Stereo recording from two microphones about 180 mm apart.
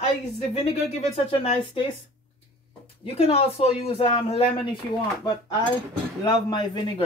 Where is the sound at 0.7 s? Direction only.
35° left (ahead or behind).